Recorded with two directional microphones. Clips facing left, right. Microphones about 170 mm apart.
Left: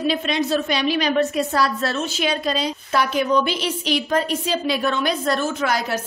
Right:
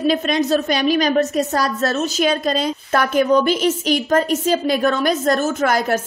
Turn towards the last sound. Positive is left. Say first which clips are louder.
# right 4 dB
turn(degrees=-50)  # may be behind; listen again after turning